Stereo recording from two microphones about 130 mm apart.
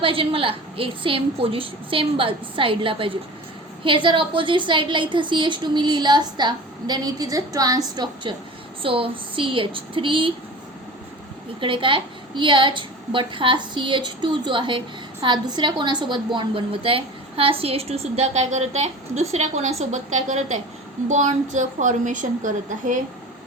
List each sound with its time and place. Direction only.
0.0 s a woman's voice: 45° right (ahead or behind)
8.8 s a woman's voice: 45° right (ahead or behind)
11.6 s a woman's voice: 40° right (ahead or behind); by 23.0 s 90° right